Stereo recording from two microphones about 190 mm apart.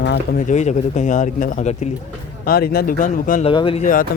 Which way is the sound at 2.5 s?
55° left (ahead or behind).